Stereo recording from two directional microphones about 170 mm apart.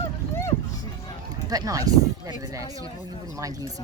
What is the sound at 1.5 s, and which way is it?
Speech, 20° right (ahead or behind).